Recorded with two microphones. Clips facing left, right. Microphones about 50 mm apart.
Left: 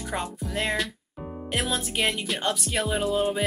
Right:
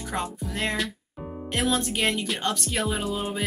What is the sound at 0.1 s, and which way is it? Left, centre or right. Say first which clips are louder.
Speech: even; centre.